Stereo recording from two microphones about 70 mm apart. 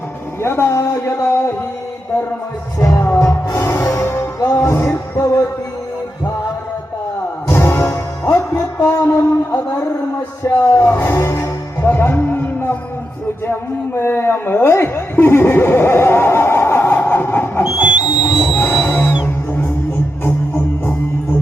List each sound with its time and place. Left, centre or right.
0.4 s speech: left
2.7 s music: left
3.2 s music: left
7.4 s music: left
9.5 s a sound: left
10.4 s speech: left
10.8 s music: left
13.5 s a man's voice: left
17.6 s whistle: centre
18.6 s music: centre